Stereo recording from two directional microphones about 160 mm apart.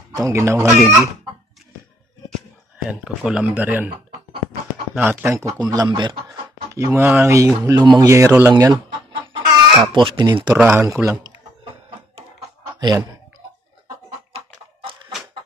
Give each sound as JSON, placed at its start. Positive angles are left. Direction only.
{"t": 0.1, "sound": "speech", "side_deg": -20}
{"t": 2.9, "sound": "speech", "side_deg": -5}
{"t": 4.9, "sound": "speech", "side_deg": -10}
{"t": 6.7, "sound": "speech", "side_deg": -15}
{"t": 9.2, "sound": "chicken", "side_deg": -30}
{"t": 10.6, "sound": "speech", "side_deg": -15}
{"t": 12.2, "sound": "a sound", "side_deg": -35}